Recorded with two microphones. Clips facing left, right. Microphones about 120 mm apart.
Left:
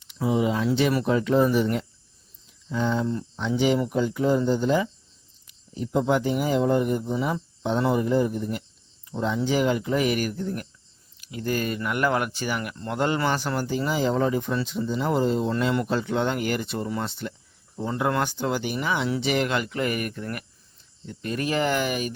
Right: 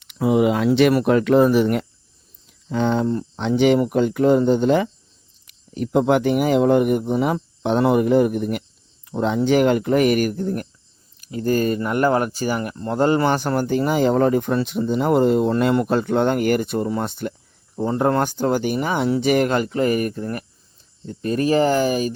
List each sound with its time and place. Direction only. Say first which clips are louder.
0.0 s speech: right 6 dB; 65° right (ahead or behind)
3.1 s speech: right 6 dB; 45° right (ahead or behind)
3.4 s speech: right 6 dB; 65° right (ahead or behind); by 22.1 s 35° right (ahead or behind)